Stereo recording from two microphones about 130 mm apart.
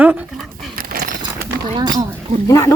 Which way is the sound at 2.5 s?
25° left (ahead or behind).